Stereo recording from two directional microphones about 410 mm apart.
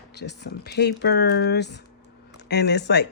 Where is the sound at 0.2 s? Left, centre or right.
Left.